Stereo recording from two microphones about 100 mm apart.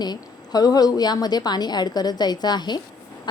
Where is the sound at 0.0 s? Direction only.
40° left (ahead or behind).